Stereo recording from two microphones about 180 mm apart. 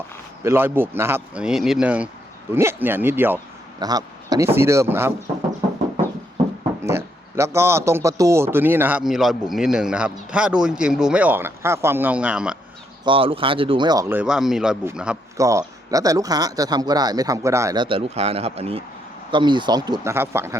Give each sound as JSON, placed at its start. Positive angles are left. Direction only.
{"t": 0.4, "sound": "a man's voice", "side_deg": -10}
{"t": 3.8, "sound": "a sound", "side_deg": -20}
{"t": 4.5, "sound": "a man's voice", "side_deg": -15}
{"t": 6.8, "sound": "a man's voice", "side_deg": -15}
{"t": 13.1, "sound": "speech", "side_deg": -30}
{"t": 14.1, "sound": "speech", "side_deg": -5}
{"t": 15.4, "sound": "speech", "side_deg": -20}
{"t": 17.8, "sound": "speech", "side_deg": -30}